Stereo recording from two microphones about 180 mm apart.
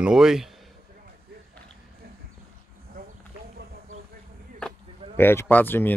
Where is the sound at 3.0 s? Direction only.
55° right (ahead or behind).